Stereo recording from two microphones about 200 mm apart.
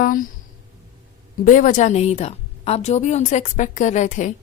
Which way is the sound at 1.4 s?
40° left (ahead or behind).